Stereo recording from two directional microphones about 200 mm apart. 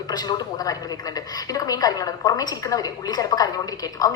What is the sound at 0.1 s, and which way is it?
A woman's voice, 20° left (ahead or behind).